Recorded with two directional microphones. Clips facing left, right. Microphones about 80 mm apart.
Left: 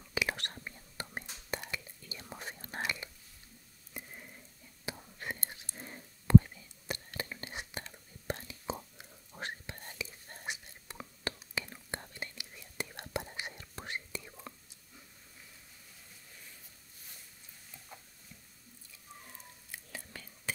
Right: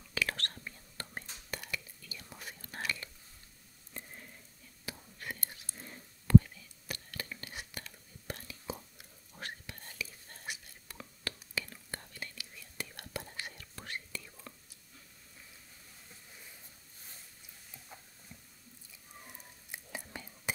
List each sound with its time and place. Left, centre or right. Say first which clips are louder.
0.1 s whispering: left 1 dB; centre
3.9 s sizzle: left 1 dB; centre
4.8 s whispering: left 3 dB; left
19.7 s whispering: right 3 dB; centre